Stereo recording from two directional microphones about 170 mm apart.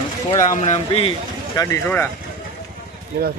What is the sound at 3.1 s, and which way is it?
Speech, 70° right (ahead or behind).